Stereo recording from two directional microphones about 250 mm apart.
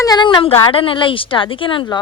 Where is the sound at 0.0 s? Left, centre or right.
Centre.